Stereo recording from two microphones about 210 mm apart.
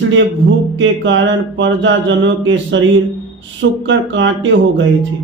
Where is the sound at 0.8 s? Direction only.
60° right (ahead or behind).